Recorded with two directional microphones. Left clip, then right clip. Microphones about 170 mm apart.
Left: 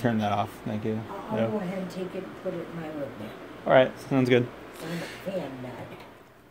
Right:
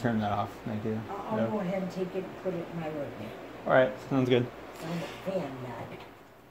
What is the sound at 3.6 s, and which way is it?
Speech, 25° left (ahead or behind).